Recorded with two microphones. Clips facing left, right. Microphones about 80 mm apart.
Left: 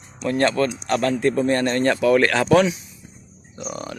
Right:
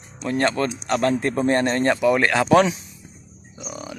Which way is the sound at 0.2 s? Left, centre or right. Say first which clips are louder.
Left 2 dB; centre.